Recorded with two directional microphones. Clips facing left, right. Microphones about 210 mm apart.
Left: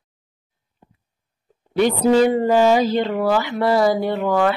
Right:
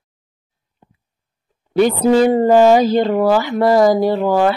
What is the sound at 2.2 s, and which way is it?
Speech, 45° right (ahead or behind).